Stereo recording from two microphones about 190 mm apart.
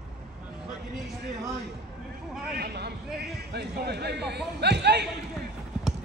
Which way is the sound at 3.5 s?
60° right (ahead or behind).